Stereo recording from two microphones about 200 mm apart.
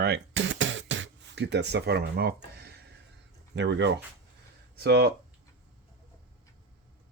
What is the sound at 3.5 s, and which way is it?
Speech, 60° right (ahead or behind).